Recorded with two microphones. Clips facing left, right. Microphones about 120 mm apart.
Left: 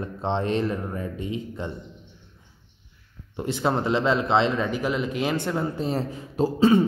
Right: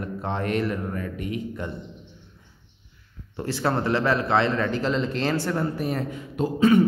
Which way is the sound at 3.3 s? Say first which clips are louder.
Left 1 dB; 20° left (ahead or behind).